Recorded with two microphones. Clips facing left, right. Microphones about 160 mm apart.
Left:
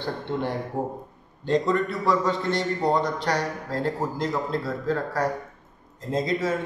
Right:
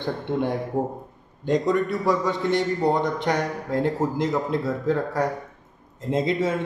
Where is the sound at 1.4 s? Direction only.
15° right (ahead or behind).